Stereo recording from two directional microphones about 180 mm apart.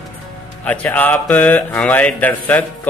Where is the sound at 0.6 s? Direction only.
10° left (ahead or behind).